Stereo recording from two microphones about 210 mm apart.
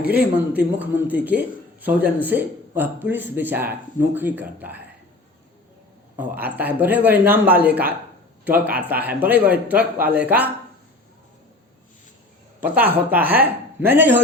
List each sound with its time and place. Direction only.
0.2 s speech: 10° right (ahead or behind)
6.1 s speech: 10° right (ahead or behind)
12.5 s speech: 10° right (ahead or behind)